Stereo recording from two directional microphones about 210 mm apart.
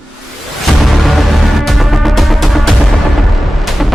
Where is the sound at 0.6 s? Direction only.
Centre (ahead or behind).